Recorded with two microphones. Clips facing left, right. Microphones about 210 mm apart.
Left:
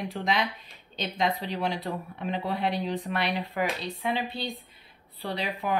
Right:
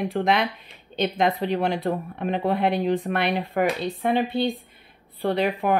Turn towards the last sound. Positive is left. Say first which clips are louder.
# right 8 dB
turn(degrees=-55)  # may be behind; listen again after turning